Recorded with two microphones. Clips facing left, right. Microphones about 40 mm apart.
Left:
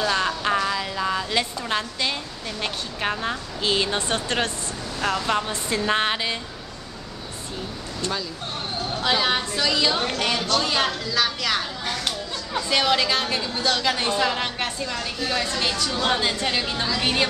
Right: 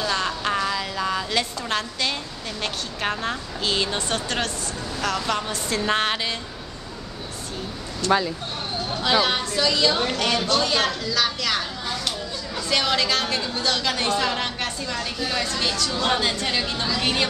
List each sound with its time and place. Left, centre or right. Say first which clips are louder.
0.0 s a sound: left 2 dB; centre
2.6 s a woman's voice: even; centre
4.1 s a woman's voice: left 1 dB; left
5.8 s a woman's voice: even; centre
8.0 s a woman's voice: right 8 dB; left
9.2 s a woman's voice: right 1 dB; centre
12.6 s a woman's voice: left 1 dB; centre
15.4 s a woman's voice: even; centre